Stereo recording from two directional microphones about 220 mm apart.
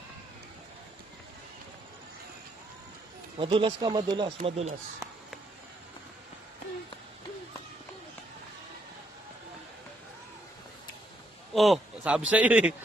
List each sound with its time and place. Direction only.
3.3 s speech: 25° right (ahead or behind)
4.4 s speech: 30° right (ahead or behind)
11.5 s speech: centre (ahead or behind)